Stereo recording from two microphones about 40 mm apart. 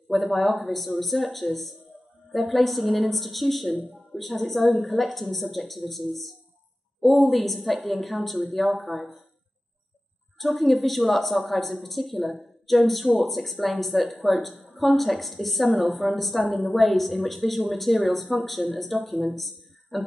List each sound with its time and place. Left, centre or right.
0.1 s a woman's voice: centre
10.4 s a woman's voice: centre